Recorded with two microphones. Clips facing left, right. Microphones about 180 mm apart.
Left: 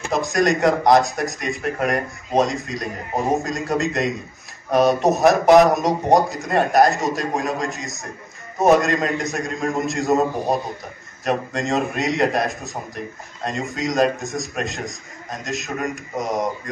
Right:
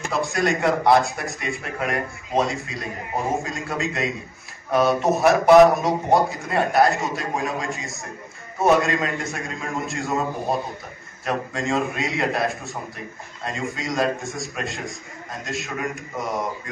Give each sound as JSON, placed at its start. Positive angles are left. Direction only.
{"t": 0.1, "sound": "a man's voice", "side_deg": 40}
{"t": 11.2, "sound": "a man's voice", "side_deg": 40}